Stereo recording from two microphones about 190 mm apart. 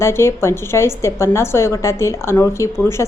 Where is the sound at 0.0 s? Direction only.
15° left (ahead or behind).